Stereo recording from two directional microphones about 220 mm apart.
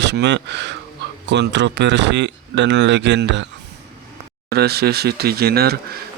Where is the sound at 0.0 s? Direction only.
50° right (ahead or behind).